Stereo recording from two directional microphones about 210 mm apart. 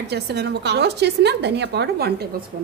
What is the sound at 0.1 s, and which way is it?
A woman's voice, 50° right (ahead or behind).